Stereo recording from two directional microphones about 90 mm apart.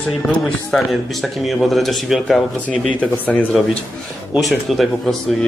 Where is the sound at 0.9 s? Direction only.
Centre (ahead or behind).